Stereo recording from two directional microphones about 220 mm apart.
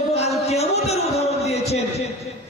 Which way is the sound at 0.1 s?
30° left (ahead or behind).